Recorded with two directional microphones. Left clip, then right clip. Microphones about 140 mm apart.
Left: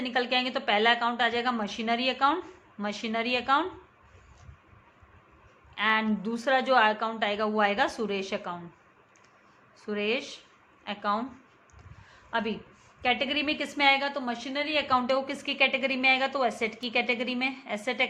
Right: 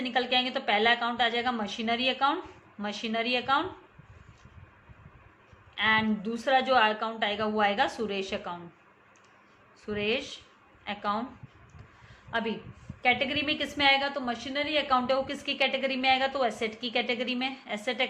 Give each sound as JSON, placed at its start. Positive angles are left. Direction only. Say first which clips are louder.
{"t": 0.0, "sound": "a woman's voice", "louder": "even", "side_deg": 25}
{"t": 5.7, "sound": "a woman's voice", "louder": "right 1 dB", "side_deg": 25}
{"t": 9.8, "sound": "a woman's voice", "louder": "even", "side_deg": 25}
{"t": 12.3, "sound": "a woman's voice", "louder": "left 1 dB", "side_deg": 15}